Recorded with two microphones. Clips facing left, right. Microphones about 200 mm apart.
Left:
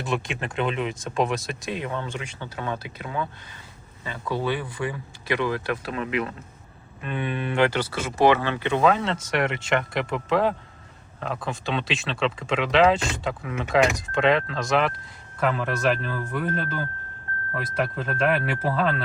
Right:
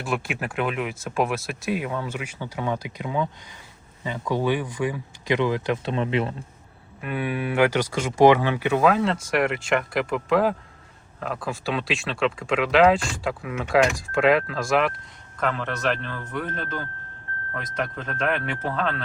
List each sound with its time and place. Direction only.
0.0 s speech: 5° right (ahead or behind); by 6.3 s 30° right (ahead or behind)
7.0 s speech: 10° right (ahead or behind)